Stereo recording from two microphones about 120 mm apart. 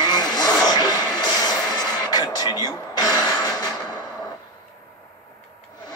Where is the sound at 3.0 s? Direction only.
30° left (ahead or behind).